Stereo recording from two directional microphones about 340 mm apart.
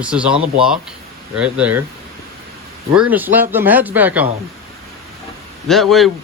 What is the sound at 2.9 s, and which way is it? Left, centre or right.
Speech, centre.